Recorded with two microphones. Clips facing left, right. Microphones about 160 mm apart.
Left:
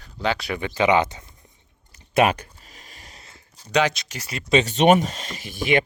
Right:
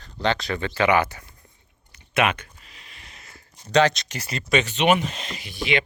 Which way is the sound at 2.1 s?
35° left (ahead or behind).